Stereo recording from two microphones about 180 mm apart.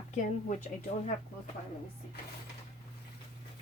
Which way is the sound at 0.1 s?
40° left (ahead or behind).